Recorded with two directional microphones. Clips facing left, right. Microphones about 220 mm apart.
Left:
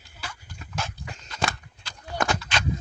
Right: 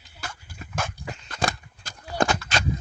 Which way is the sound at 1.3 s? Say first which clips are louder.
Right 2 dB; 45° right (ahead or behind).